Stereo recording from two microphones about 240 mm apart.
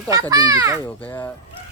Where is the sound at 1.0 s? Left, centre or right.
Centre.